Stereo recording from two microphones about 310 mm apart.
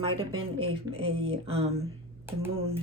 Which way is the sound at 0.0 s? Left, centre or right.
Centre.